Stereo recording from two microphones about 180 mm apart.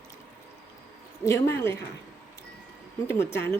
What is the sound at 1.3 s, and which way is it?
Speech, 15° left (ahead or behind).